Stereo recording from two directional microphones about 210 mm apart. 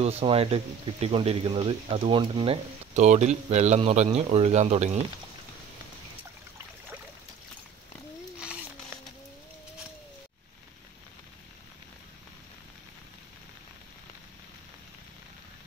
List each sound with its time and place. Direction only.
0.0 s speech: 30° right (ahead or behind)